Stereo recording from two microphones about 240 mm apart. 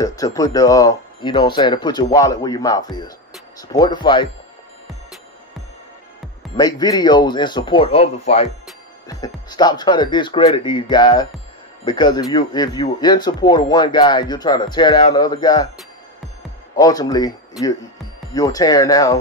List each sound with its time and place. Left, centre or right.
0.0 s speech: centre
6.5 s speech: centre
16.7 s speech: centre